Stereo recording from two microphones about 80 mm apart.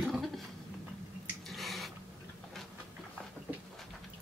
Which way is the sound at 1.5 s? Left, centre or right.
Centre.